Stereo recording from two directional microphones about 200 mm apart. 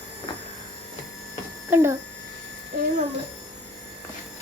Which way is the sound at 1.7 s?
10° right (ahead or behind).